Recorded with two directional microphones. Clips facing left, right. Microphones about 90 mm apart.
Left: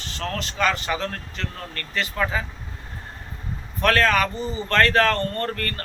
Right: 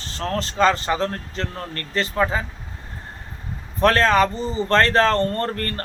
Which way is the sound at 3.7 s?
30° right (ahead or behind).